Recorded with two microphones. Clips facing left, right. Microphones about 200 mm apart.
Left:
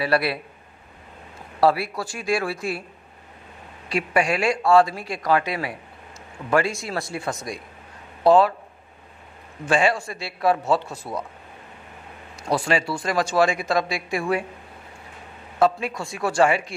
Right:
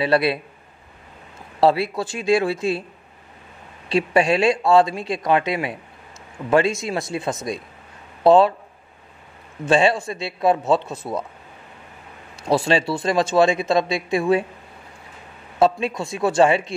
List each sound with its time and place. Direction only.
0.0 s speech: 20° right (ahead or behind)
1.6 s speech: 25° right (ahead or behind)
3.9 s speech: 25° right (ahead or behind)
9.7 s speech: 25° right (ahead or behind)
12.4 s speech: 25° right (ahead or behind)
15.6 s speech: 25° right (ahead or behind)